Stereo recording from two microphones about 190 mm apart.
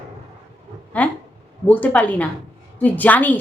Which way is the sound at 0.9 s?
5° left (ahead or behind).